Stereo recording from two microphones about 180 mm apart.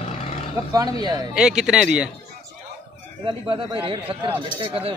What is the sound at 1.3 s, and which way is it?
Speech, 5° right (ahead or behind).